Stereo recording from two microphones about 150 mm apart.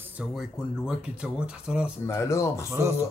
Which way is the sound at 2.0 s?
20° left (ahead or behind).